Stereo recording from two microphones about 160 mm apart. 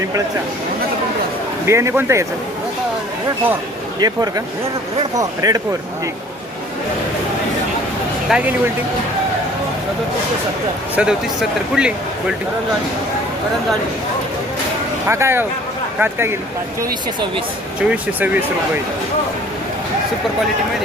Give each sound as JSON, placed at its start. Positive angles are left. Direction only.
{"t": 1.6, "sound": "speech", "side_deg": -15}
{"t": 4.0, "sound": "speech", "side_deg": -25}
{"t": 8.3, "sound": "speech", "side_deg": -5}
{"t": 10.9, "sound": "speech", "side_deg": -5}
{"t": 15.0, "sound": "speech", "side_deg": -15}
{"t": 17.7, "sound": "speech", "side_deg": -10}